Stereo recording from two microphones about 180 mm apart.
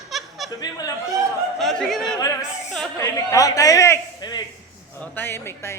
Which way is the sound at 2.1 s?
20° left (ahead or behind).